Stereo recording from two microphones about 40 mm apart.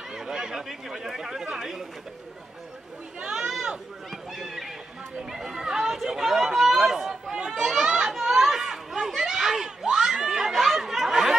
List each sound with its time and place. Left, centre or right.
0.1 s speech: centre
3.2 s speech: centre
4.1 s speech: centre
7.3 s chatter: centre